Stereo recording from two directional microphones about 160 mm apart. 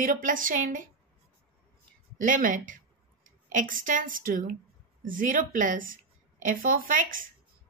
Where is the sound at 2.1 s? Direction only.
55° right (ahead or behind).